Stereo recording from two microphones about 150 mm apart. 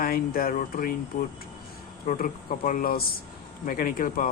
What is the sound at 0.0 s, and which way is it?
Speech, 75° left (ahead or behind).